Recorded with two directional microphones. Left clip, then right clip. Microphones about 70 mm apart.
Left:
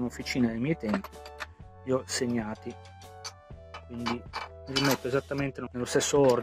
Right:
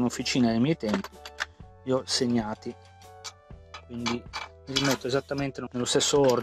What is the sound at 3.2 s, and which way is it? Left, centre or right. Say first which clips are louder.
Music: even; right.